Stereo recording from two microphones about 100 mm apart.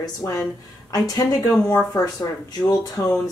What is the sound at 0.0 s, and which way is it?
A woman's voice, 35° left (ahead or behind).